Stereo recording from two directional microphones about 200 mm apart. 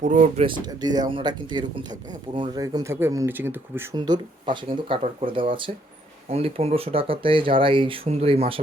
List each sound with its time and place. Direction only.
0.0 s speech: 35° right (ahead or behind)
0.4 s speech: 20° right (ahead or behind)